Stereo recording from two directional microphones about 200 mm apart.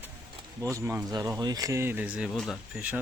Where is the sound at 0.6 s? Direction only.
15° right (ahead or behind).